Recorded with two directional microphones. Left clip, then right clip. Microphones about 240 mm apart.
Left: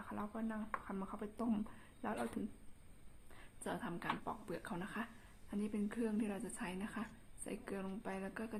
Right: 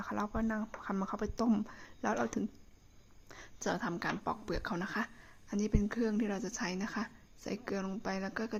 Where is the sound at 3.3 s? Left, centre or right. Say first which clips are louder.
Right 9 dB; right.